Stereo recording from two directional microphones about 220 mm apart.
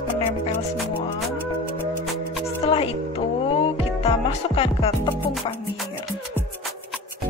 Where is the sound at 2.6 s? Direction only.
25° left (ahead or behind).